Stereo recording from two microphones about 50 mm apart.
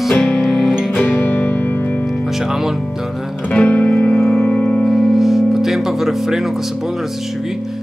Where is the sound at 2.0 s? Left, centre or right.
Centre.